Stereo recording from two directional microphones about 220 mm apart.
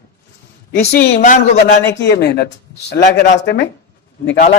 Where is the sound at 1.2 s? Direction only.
30° left (ahead or behind).